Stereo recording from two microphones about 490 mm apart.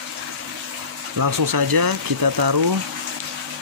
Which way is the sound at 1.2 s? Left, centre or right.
Right.